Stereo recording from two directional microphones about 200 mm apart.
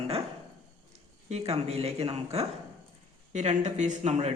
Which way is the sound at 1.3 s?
30° right (ahead or behind).